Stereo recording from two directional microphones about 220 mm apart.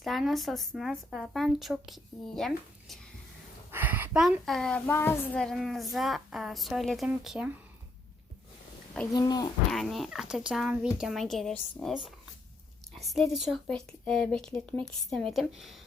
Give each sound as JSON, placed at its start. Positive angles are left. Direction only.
{"t": 0.0, "sound": "a woman's voice", "side_deg": 0}
{"t": 3.7, "sound": "a woman's voice", "side_deg": -10}
{"t": 9.1, "sound": "speech", "side_deg": 15}
{"t": 9.7, "sound": "a woman's voice", "side_deg": 0}